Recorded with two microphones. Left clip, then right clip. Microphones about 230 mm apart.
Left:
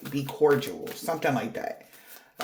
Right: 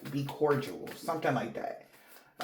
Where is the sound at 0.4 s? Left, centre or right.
Left.